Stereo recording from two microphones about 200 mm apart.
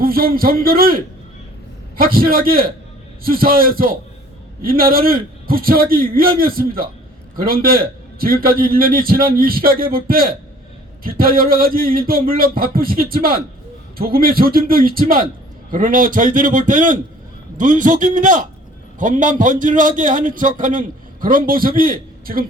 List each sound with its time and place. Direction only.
0.0 s a man's voice: 45° right (ahead or behind)